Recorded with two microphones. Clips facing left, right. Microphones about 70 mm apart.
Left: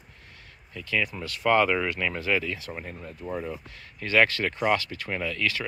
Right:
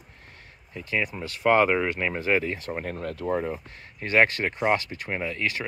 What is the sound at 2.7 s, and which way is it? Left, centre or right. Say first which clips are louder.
Speech: right 7 dB; right.